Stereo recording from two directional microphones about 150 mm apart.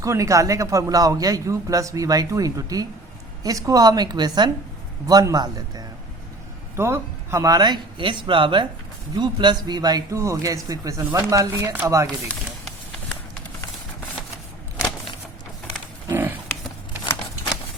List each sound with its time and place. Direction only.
0.0 s a man's voice: 20° right (ahead or behind)
6.7 s a man's voice: 15° right (ahead or behind)
16.0 s a sound: 15° right (ahead or behind)